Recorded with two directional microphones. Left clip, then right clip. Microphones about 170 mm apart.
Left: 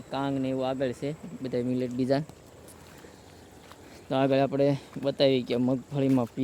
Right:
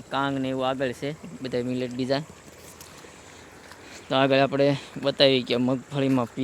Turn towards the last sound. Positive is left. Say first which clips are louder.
# right 2 dB
turn(degrees=10)  # may be behind; listen again after turning